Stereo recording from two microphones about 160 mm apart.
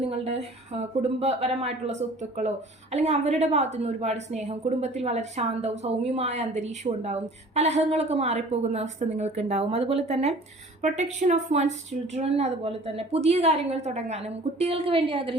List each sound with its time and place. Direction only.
0.1 s a woman's voice: 40° right (ahead or behind)